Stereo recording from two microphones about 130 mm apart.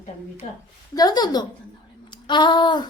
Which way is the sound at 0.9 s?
30° left (ahead or behind).